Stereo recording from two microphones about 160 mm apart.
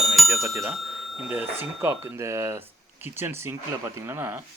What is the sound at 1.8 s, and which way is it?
Speech, 15° right (ahead or behind).